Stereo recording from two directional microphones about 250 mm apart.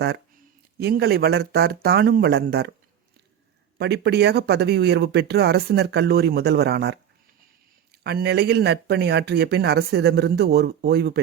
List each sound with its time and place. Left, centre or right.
0.8 s speech: right
3.8 s speech: right
8.0 s speech: right